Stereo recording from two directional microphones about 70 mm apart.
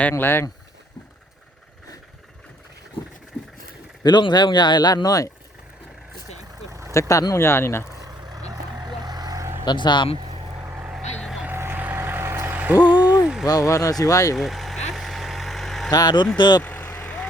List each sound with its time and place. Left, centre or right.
0.1 s speech: left
4.0 s speech: left
6.7 s vehicle: right
7.1 s speech: left
7.3 s speech: left
7.9 s vehicle: right
9.4 s vehicle: right
9.6 s speech: left
10.7 s vehicle: right
12.5 s a sound: right
13.4 s speech: left
14.3 s vehicle: centre
15.9 s speech: left